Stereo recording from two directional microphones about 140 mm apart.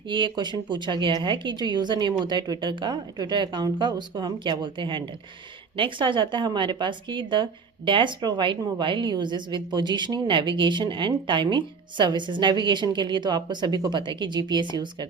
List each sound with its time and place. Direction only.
0.1 s a woman's voice: 35° right (ahead or behind)